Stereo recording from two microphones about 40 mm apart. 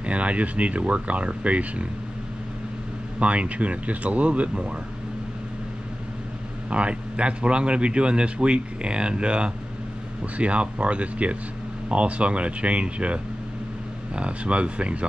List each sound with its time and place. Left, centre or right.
0.0 s speech: right
3.2 s speech: right
6.7 s speech: right